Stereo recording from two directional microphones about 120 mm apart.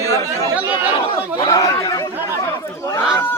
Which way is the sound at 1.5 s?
30° left (ahead or behind).